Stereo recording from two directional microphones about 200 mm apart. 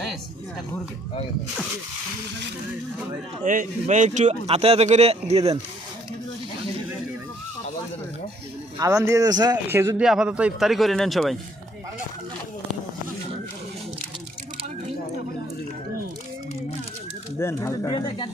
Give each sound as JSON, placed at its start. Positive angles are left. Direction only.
{"t": 3.4, "sound": "a man's voice", "side_deg": -40}
{"t": 8.8, "sound": "speech", "side_deg": -15}
{"t": 10.0, "sound": "a man's voice", "side_deg": -5}
{"t": 17.4, "sound": "speech", "side_deg": 15}